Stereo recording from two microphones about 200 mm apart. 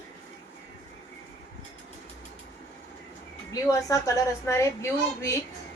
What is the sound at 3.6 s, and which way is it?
A woman's voice, 15° left (ahead or behind).